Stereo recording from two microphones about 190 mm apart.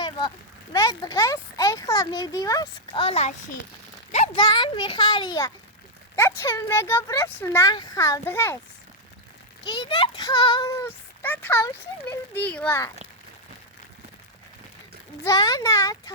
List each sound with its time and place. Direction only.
0.0 s a child's voice: 25° left (ahead or behind)
9.6 s a child's voice: 25° left (ahead or behind)
15.2 s speech: 20° left (ahead or behind)